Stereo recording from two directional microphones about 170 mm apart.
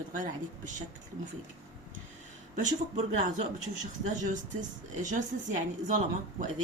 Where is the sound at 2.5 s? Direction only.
45° right (ahead or behind).